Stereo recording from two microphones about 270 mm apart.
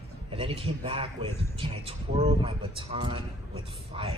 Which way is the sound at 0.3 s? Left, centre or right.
Centre.